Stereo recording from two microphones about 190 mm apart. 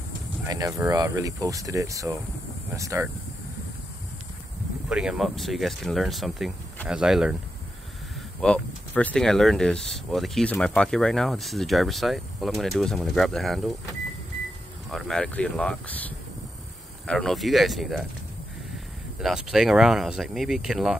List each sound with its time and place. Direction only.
0.5 s speech: 15° right (ahead or behind)
4.8 s speech: 5° right (ahead or behind)
8.4 s speech: 5° left (ahead or behind)
14.9 s speech: centre (ahead or behind)
19.1 s speech: 5° right (ahead or behind)